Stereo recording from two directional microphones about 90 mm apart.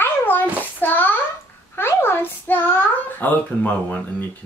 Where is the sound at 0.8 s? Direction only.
20° left (ahead or behind).